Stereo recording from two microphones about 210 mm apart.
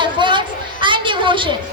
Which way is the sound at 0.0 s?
20° right (ahead or behind).